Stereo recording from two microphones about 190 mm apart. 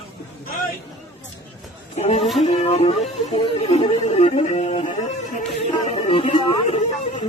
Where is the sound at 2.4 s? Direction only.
35° left (ahead or behind).